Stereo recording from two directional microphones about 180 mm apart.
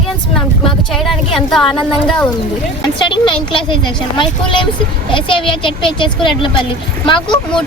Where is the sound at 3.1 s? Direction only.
25° left (ahead or behind).